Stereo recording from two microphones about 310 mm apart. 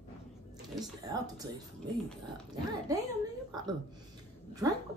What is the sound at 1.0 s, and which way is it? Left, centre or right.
Speech, centre.